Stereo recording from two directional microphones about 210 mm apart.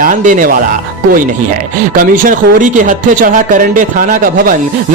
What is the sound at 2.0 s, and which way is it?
Speech, 40° right (ahead or behind).